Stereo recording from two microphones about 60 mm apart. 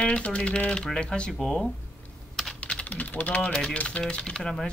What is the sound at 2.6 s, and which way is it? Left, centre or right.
Speech, centre.